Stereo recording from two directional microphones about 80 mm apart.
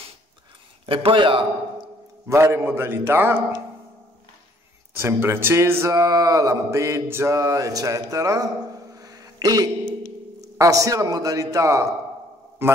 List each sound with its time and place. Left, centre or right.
1.0 s a man's voice: right
2.2 s mantra: right
4.9 s mantra: right
5.9 s mantra: right
7.3 s a man's voice: right
8.9 s a sound: right
10.4 s a man's voice: right
12.6 s mantra: right